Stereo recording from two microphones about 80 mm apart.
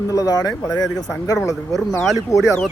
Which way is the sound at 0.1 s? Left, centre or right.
Left.